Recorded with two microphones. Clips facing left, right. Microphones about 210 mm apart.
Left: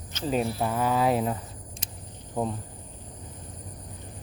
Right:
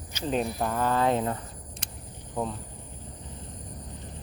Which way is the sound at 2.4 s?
25° left (ahead or behind).